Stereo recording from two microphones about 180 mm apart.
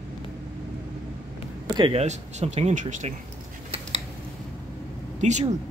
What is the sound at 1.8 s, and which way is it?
Speech, 30° right (ahead or behind).